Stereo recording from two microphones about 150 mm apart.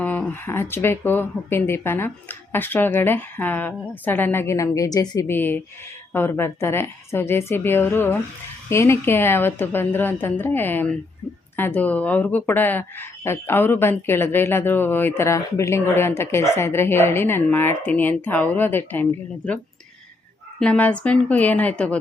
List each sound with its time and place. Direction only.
0.0 s speech: 10° left (ahead or behind)
20.6 s speech: 10° left (ahead or behind)